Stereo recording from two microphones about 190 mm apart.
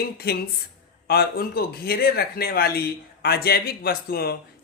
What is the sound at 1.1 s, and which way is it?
Speech, 55° left (ahead or behind).